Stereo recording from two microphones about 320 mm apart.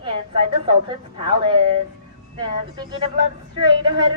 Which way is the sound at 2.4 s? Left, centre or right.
Centre.